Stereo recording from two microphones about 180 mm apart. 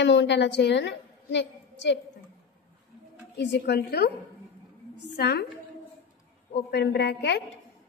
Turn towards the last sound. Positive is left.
turn(degrees=70)  # may be behind; listen again after turning